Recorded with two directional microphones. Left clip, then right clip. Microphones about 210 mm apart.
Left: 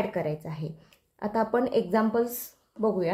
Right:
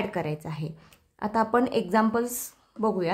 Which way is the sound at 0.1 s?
30° right (ahead or behind).